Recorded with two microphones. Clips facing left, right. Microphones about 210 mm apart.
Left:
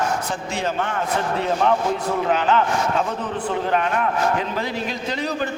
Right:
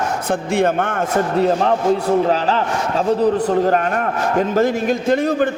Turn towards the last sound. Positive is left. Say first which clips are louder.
# right 9 dB
turn(degrees=-50)  # may be behind; listen again after turning